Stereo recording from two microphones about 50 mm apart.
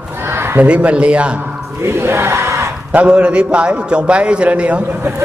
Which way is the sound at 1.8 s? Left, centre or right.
Right.